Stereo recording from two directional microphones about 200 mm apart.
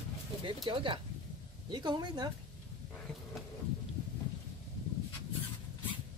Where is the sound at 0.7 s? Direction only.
25° right (ahead or behind).